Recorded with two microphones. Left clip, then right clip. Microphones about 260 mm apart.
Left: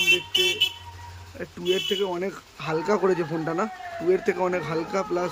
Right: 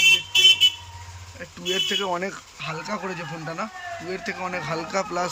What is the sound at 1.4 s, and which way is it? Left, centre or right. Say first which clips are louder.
Speech: even; centre.